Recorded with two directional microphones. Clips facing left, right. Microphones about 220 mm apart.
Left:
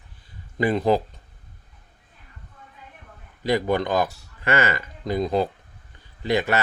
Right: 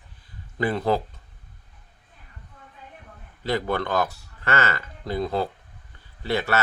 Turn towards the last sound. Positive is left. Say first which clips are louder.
# left 3 dB
turn(degrees=15)  # may be behind; listen again after turning